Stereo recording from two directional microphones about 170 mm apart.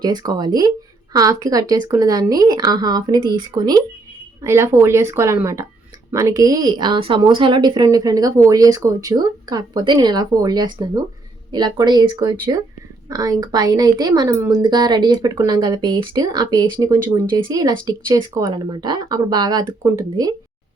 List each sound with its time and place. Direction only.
0.0 s a woman's voice: 25° right (ahead or behind)